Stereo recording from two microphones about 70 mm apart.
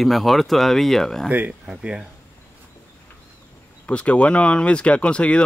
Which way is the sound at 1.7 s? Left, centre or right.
Centre.